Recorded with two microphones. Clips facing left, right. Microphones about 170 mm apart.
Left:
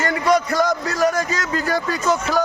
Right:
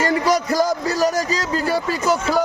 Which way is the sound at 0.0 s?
35° right (ahead or behind).